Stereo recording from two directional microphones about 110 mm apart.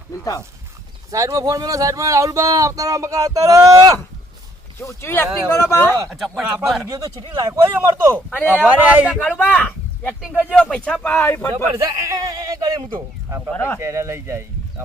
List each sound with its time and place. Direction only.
1.1 s speech: 30° right (ahead or behind)
4.8 s speech: 25° left (ahead or behind)
6.1 s speech: centre (ahead or behind)
6.8 s speech: 35° right (ahead or behind)
8.1 s speech: 15° left (ahead or behind)
8.4 s speech: 10° right (ahead or behind)
9.3 s speech: 15° left (ahead or behind)
10.2 s speech: 5° right (ahead or behind)
10.6 s speech: 10° left (ahead or behind)
11.8 s speech: 30° right (ahead or behind)
13.5 s speech: 20° left (ahead or behind)
13.7 s speech: 25° right (ahead or behind)